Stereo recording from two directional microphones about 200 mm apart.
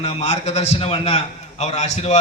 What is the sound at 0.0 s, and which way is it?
A man's voice, 30° left (ahead or behind).